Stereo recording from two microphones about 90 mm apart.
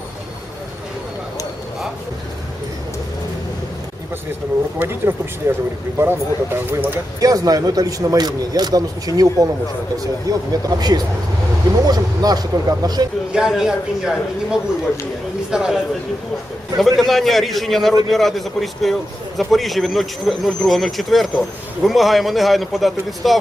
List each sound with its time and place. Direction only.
4.8 s speech: 25° right (ahead or behind)
7.2 s a man's voice: 40° right (ahead or behind)
13.3 s speech: 5° right (ahead or behind)
15.4 s speech: 5° right (ahead or behind)